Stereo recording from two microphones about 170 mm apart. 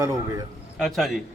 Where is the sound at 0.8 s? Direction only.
Centre (ahead or behind).